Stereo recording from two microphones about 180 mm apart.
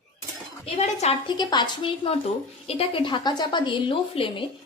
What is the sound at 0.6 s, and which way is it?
Speech, 35° left (ahead or behind).